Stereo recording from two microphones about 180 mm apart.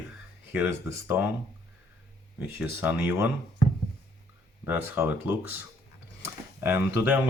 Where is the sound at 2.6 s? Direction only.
10° right (ahead or behind).